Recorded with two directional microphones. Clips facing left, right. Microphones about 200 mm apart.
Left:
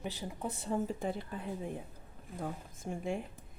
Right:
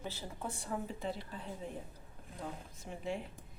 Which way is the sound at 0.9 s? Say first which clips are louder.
Left 4 dB; 50° left (ahead or behind).